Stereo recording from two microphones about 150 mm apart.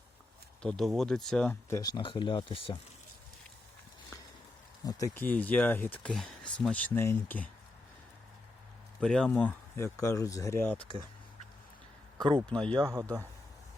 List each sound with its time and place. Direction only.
0.6 s speech: 5° left (ahead or behind)
1.7 s speech: 25° left (ahead or behind)
4.8 s speech: 25° left (ahead or behind)
9.0 s speech: 5° left (ahead or behind)
12.1 s speech: 25° right (ahead or behind)
12.5 s speech: 5° left (ahead or behind)
12.8 s speech: 20° right (ahead or behind)